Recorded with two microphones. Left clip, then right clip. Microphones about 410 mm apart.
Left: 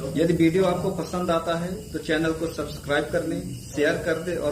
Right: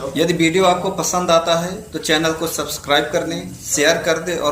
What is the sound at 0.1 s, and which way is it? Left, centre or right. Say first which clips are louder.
Speech: right 4 dB; left.